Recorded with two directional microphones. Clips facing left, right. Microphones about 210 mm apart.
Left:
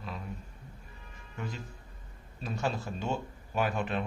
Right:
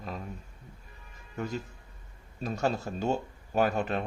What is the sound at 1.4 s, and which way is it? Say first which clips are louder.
Speech: right 6 dB; 45° right (ahead or behind).